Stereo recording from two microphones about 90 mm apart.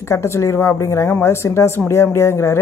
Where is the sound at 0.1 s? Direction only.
30° left (ahead or behind).